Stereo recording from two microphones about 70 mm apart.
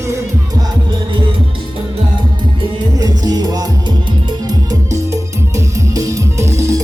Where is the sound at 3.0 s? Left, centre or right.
Right.